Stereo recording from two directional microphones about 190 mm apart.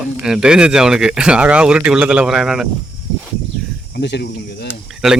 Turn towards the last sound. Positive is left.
turn(degrees=0)  # may be behind; listen again after turning